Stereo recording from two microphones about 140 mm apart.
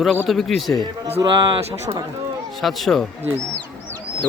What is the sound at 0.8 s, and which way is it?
Speech, 45° right (ahead or behind).